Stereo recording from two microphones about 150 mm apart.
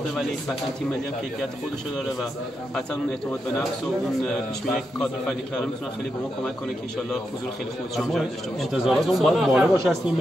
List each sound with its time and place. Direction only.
7.9 s speech: centre (ahead or behind)